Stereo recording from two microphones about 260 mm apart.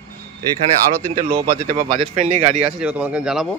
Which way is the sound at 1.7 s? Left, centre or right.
Right.